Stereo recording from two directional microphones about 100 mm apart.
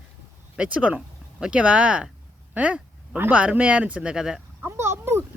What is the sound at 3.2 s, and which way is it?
Speech, 15° right (ahead or behind).